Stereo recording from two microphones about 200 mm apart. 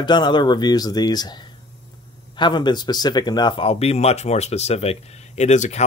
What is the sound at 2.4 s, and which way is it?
Speech, 20° left (ahead or behind).